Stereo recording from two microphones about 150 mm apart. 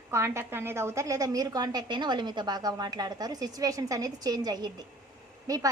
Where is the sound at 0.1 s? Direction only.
20° right (ahead or behind).